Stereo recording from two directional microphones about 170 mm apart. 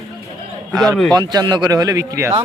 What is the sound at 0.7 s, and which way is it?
Speech, centre (ahead or behind).